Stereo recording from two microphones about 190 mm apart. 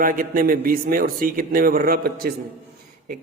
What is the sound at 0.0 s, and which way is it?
A man's voice, 45° right (ahead or behind).